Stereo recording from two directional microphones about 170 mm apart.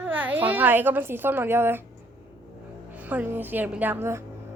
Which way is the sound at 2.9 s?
10° right (ahead or behind).